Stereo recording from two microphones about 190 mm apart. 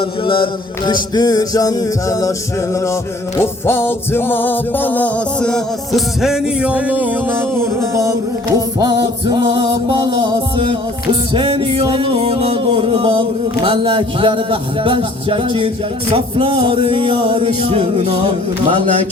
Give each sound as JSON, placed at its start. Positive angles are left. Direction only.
{"t": 0.0, "sound": "music", "side_deg": 25}